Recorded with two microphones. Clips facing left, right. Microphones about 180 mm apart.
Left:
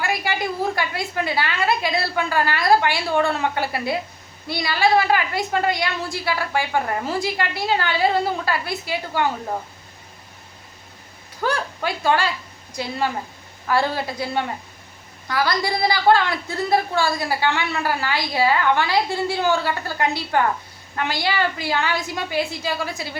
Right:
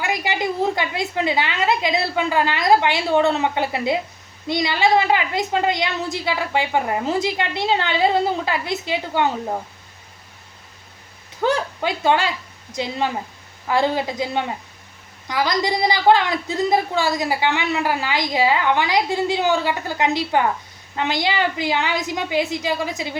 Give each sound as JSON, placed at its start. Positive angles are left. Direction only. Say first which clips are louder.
{"t": 0.0, "sound": "a woman's voice", "louder": "right 1 dB", "side_deg": -20}
{"t": 11.4, "sound": "a woman's voice", "louder": "right 3 dB", "side_deg": -20}